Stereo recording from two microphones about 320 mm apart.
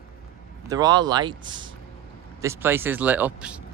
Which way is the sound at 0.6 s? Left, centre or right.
Centre.